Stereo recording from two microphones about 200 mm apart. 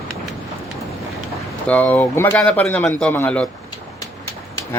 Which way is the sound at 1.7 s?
5° left (ahead or behind).